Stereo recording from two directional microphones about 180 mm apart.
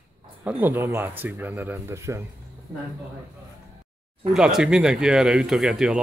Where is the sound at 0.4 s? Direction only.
10° right (ahead or behind).